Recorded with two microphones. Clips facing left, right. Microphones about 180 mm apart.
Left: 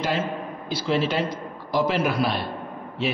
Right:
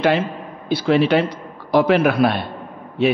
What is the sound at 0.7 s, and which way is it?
A man's voice, 60° right (ahead or behind).